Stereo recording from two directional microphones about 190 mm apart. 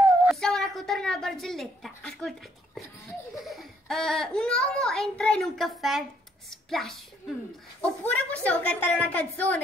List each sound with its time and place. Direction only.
0.3 s a woman's voice: centre (ahead or behind)